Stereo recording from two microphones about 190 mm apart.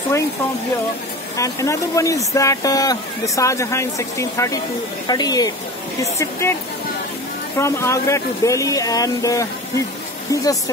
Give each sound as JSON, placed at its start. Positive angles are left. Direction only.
{"t": 1.3, "sound": "speech", "side_deg": 15}
{"t": 7.5, "sound": "speech", "side_deg": 15}